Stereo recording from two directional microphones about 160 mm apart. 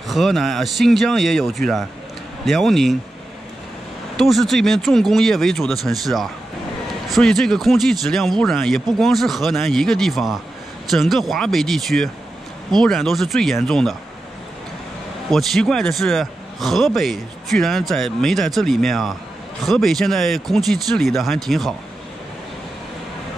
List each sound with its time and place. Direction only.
0.1 s a man's voice: centre (ahead or behind)
4.2 s a man's voice: centre (ahead or behind)
15.3 s a man's voice: centre (ahead or behind)